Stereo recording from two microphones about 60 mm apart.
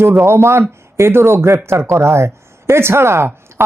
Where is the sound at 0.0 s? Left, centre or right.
Right.